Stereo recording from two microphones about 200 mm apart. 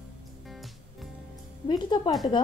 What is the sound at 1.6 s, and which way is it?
Speech, 20° left (ahead or behind).